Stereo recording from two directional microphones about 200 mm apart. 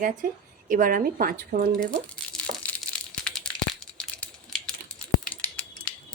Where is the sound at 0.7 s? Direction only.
45° right (ahead or behind).